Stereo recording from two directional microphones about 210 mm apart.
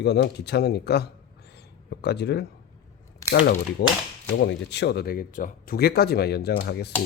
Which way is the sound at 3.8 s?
55° left (ahead or behind).